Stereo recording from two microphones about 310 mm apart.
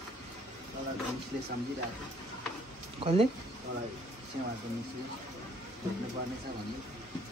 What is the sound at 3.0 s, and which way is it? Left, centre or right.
Speech, centre.